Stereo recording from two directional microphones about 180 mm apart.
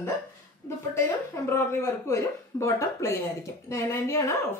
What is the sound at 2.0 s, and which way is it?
Speech, 15° left (ahead or behind).